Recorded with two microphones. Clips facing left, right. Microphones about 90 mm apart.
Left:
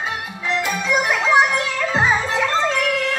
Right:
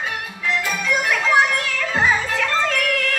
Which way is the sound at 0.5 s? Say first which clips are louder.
Left 1 dB; 20° left (ahead or behind).